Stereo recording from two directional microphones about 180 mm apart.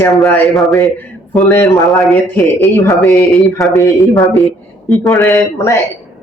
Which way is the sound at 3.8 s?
15° left (ahead or behind).